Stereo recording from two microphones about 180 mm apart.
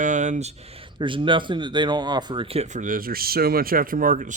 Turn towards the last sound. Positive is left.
turn(degrees=-45)  # may be behind; listen again after turning